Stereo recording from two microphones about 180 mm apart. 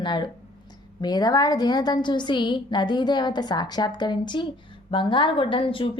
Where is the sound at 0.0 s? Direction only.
25° left (ahead or behind).